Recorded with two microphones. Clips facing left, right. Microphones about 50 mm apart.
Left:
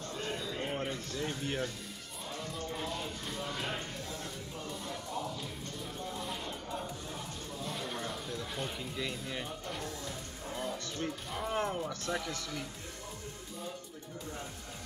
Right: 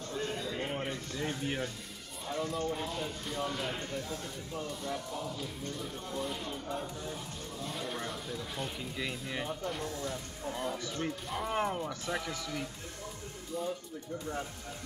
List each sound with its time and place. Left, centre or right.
0.4 s a sound: centre
0.7 s music: centre
2.2 s speech: centre
8.9 s speech: centre